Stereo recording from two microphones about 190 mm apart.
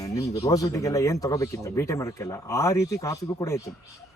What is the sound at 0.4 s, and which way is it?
A man's voice, 15° left (ahead or behind).